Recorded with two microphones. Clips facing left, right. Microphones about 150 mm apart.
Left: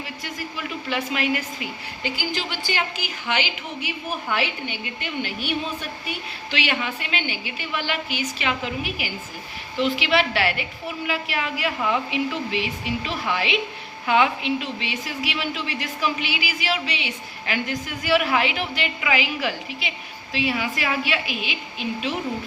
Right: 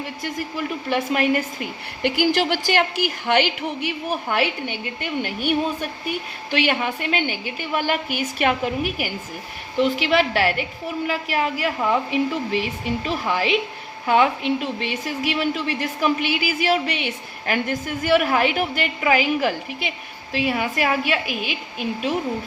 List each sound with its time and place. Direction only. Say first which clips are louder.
0.0 s a woman's voice: right 5 dB; 50° right (ahead or behind)